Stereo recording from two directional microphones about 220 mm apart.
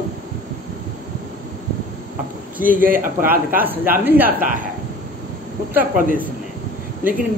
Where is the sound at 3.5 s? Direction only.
10° right (ahead or behind).